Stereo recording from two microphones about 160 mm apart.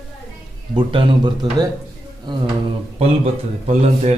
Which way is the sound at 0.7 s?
30° right (ahead or behind).